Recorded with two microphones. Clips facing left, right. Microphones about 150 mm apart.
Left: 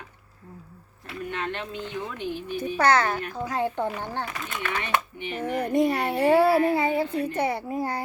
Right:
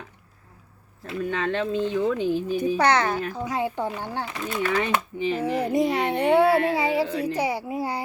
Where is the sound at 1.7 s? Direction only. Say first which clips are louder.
Right 10 dB; 30° right (ahead or behind).